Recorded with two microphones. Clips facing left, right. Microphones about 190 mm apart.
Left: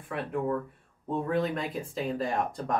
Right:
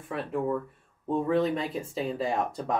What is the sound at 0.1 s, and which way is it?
Speech, centre (ahead or behind).